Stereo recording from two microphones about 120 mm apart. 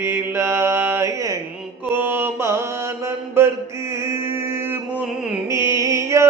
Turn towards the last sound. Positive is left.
turn(degrees=-25)  # may be behind; listen again after turning